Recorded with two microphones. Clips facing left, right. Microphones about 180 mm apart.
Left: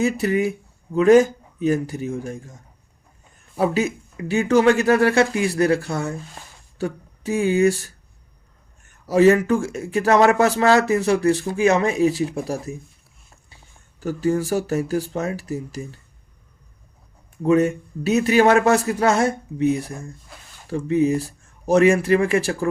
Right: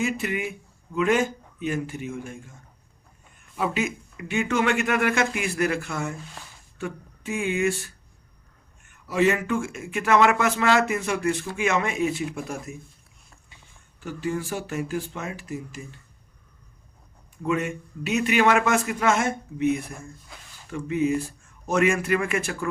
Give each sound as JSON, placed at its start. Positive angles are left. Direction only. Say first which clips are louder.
{"t": 0.0, "sound": "speech", "louder": "left 7 dB", "side_deg": 40}
{"t": 9.0, "sound": "speech", "louder": "left 8 dB", "side_deg": 40}
{"t": 14.0, "sound": "speech", "louder": "left 8 dB", "side_deg": 40}
{"t": 17.4, "sound": "speech", "louder": "left 9 dB", "side_deg": 40}